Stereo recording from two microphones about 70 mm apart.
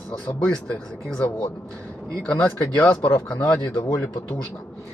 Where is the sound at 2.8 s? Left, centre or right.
Left.